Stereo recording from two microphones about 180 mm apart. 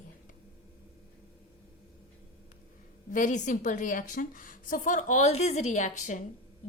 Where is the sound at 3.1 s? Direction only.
45° left (ahead or behind).